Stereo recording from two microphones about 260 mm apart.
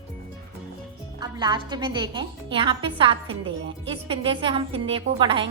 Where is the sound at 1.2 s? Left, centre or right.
Centre.